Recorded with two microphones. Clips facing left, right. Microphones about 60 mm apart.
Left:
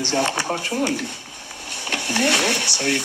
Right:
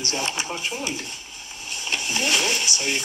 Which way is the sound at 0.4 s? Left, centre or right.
Left.